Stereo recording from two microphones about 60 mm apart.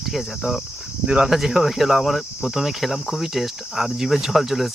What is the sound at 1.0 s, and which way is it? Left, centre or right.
Speech, centre.